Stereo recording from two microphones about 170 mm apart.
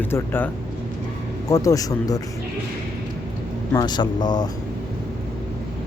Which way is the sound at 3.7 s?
25° left (ahead or behind).